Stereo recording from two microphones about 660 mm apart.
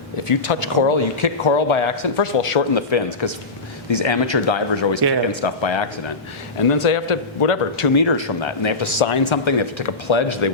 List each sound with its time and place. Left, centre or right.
0.3 s speech: left